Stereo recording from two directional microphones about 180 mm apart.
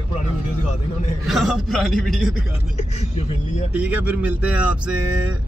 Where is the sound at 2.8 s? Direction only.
35° left (ahead or behind).